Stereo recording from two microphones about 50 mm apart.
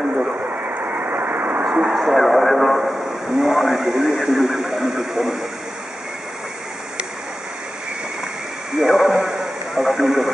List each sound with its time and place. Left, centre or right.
0.4 s vehicle: right
1.6 s a sound: centre
2.0 s speech: centre
8.7 s radio: centre